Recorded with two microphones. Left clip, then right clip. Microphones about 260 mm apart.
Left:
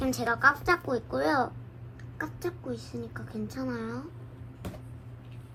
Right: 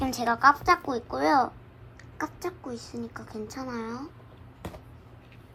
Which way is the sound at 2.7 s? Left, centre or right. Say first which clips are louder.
Right 1 dB; right.